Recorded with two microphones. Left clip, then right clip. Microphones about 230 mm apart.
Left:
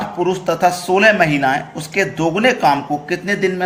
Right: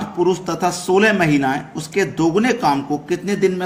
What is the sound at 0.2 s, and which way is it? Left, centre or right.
Speech, right.